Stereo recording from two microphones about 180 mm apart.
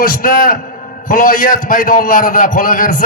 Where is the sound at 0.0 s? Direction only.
55° left (ahead or behind).